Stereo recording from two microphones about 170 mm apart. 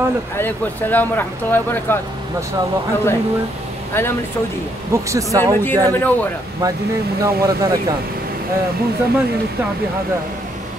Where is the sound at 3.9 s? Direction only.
15° left (ahead or behind).